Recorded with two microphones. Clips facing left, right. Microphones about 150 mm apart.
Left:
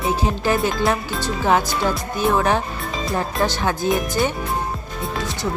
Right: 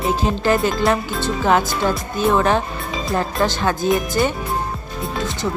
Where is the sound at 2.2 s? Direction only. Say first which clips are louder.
Right 2 dB; 10° left (ahead or behind).